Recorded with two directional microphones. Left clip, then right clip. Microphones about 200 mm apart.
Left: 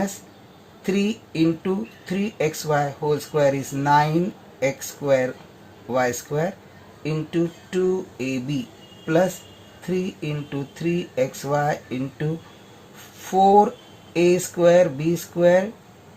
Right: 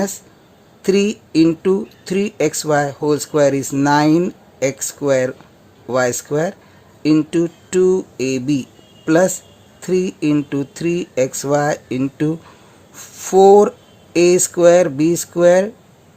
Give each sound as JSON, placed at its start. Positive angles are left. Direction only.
{"t": 0.9, "sound": "speech", "side_deg": -50}
{"t": 13.2, "sound": "speech", "side_deg": -55}